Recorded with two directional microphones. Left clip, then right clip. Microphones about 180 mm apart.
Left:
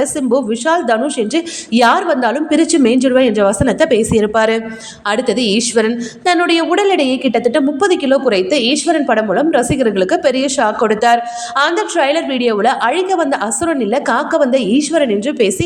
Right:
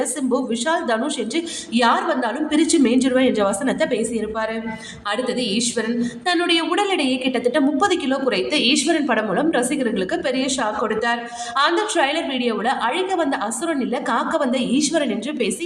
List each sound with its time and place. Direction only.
0.0 s a woman's voice: 30° left (ahead or behind)